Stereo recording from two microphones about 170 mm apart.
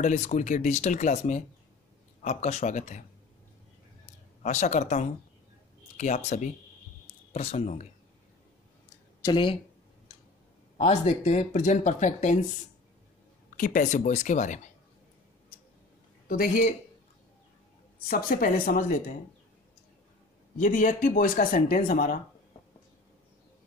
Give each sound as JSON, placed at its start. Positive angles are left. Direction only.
{"t": 0.0, "sound": "speech", "side_deg": 45}
{"t": 4.4, "sound": "speech", "side_deg": 40}
{"t": 9.2, "sound": "speech", "side_deg": 30}
{"t": 10.8, "sound": "speech", "side_deg": 40}
{"t": 13.6, "sound": "speech", "side_deg": 50}
{"t": 16.3, "sound": "a man's voice", "side_deg": 55}
{"t": 18.0, "sound": "speech", "side_deg": 55}
{"t": 20.5, "sound": "speech", "side_deg": 50}